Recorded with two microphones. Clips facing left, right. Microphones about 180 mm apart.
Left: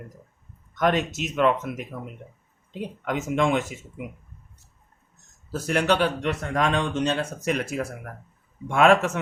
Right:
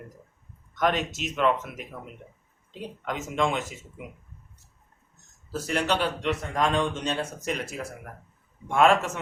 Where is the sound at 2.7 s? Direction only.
55° left (ahead or behind).